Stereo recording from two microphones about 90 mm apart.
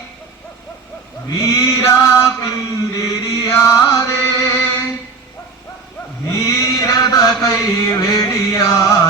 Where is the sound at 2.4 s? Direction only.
40° left (ahead or behind).